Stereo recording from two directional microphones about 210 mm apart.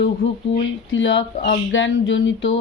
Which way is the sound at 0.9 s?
60° left (ahead or behind).